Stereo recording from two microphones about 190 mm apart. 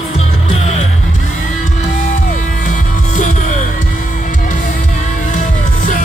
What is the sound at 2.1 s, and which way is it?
Music, 40° left (ahead or behind).